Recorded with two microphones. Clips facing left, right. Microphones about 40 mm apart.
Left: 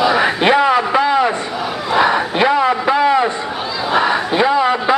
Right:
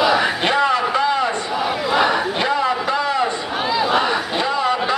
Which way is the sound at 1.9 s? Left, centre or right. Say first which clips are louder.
Left 5 dB; centre.